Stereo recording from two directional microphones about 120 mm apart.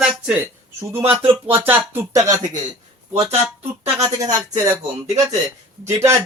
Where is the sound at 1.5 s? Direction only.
15° right (ahead or behind).